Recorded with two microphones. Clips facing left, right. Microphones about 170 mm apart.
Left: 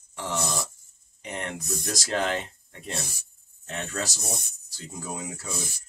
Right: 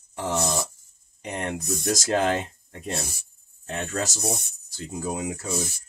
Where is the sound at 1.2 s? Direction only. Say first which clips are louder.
Right 4 dB; 40° right (ahead or behind).